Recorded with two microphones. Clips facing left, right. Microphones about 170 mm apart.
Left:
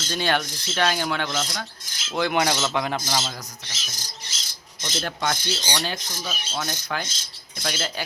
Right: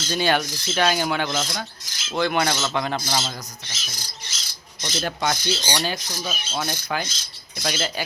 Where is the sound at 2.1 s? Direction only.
15° left (ahead or behind).